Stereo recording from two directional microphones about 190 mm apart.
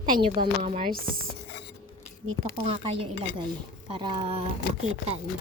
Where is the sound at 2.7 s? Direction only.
30° right (ahead or behind).